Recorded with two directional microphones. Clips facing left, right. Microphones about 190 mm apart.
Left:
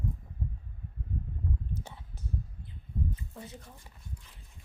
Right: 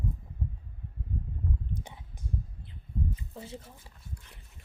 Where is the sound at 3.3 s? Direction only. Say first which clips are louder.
Right 3 dB; 30° right (ahead or behind).